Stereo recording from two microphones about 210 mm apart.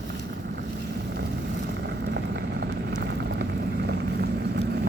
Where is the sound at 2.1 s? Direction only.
55° right (ahead or behind).